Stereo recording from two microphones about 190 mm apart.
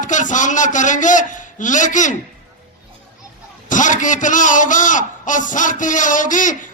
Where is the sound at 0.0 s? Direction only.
40° left (ahead or behind).